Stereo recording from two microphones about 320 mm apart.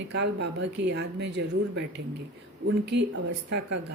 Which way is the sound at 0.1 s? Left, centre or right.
Right.